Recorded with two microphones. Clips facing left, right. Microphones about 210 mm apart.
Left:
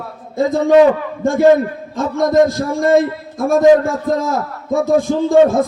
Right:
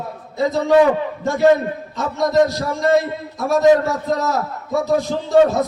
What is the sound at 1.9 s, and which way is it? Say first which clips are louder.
A man's voice: left 4 dB; 50° left (ahead or behind).